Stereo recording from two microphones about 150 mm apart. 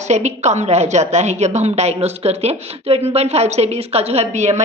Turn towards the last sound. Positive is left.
turn(degrees=-50)  # may be behind; listen again after turning